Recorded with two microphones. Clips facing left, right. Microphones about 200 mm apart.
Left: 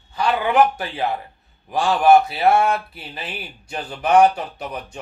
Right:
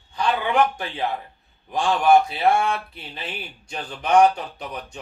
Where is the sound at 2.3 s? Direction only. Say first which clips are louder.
Left 3 dB; 5° left (ahead or behind).